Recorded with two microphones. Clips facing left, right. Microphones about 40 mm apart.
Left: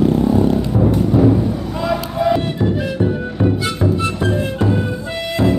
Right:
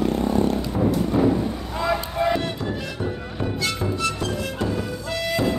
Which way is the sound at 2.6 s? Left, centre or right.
Centre.